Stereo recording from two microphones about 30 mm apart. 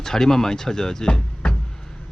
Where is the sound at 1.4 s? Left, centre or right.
Left.